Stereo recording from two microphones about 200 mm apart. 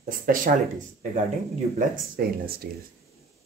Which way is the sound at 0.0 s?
45° right (ahead or behind).